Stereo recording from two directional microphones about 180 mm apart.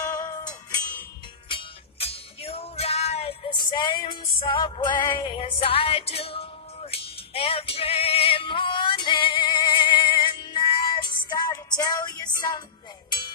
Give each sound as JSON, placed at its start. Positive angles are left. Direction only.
{"t": 0.1, "sound": "music", "side_deg": 20}
{"t": 1.5, "sound": "music", "side_deg": 30}